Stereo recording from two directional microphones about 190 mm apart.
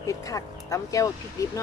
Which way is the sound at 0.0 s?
15° left (ahead or behind).